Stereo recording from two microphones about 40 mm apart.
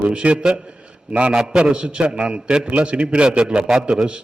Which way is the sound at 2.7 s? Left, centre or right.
Right.